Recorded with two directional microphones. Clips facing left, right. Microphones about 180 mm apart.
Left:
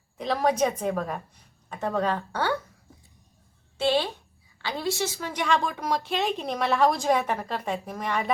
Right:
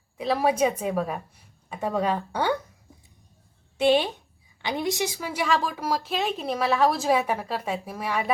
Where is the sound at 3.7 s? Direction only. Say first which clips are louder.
Right 4 dB; 15° right (ahead or behind).